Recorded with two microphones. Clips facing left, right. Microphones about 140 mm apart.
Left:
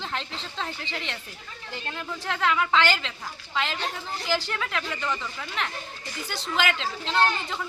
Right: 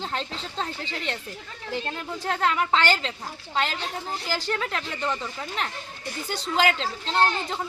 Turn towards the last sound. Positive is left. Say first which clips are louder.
# right 1 dB
turn(degrees=-35)  # may be behind; listen again after turning